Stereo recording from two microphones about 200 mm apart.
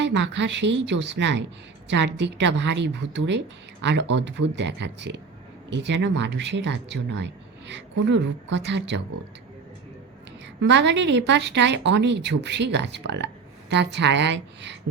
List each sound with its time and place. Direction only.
0.0 s speech: 60° right (ahead or behind)
10.6 s speech: 60° right (ahead or behind)